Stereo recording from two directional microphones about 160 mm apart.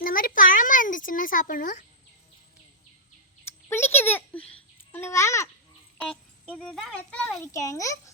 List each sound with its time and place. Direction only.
0.0 s a sound: 60° left (ahead or behind)
3.7 s babbling: 15° left (ahead or behind)
6.0 s music: 5° left (ahead or behind)
6.6 s a child's voice: 5° left (ahead or behind)
7.4 s a child's voice: 20° left (ahead or behind)